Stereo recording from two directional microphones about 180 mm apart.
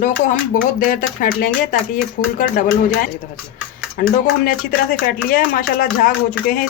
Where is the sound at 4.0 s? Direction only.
55° left (ahead or behind).